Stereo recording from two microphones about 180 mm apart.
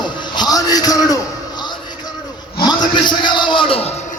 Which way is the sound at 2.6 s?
25° left (ahead or behind).